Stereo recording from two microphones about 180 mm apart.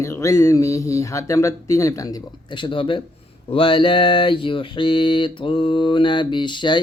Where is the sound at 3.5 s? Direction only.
30° left (ahead or behind).